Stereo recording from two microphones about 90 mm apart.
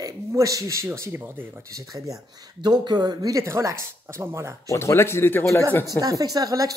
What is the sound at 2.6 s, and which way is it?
Speech, 50° right (ahead or behind).